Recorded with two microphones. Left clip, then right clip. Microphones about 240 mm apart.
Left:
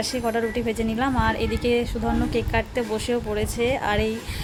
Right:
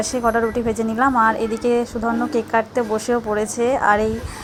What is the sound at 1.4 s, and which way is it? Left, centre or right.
Speech, right.